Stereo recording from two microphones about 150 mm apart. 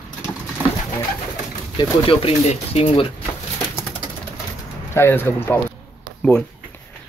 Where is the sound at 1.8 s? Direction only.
40° left (ahead or behind).